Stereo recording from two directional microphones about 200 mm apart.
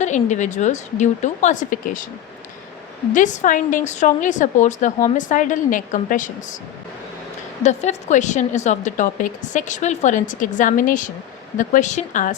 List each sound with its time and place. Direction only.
0.0 s a woman's voice: 35° left (ahead or behind)
3.1 s a woman's voice: 40° left (ahead or behind)
7.6 s a woman's voice: 35° left (ahead or behind)